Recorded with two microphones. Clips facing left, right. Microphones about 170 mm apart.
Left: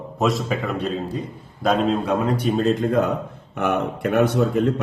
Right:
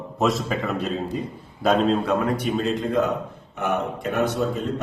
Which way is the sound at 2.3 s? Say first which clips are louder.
Left 4 dB; 35° left (ahead or behind).